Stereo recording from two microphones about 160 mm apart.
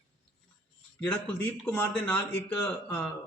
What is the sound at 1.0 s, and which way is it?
A man's voice, 10° left (ahead or behind).